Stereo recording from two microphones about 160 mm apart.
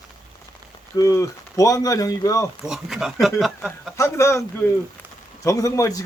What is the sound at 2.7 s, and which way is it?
Speech, 5° right (ahead or behind).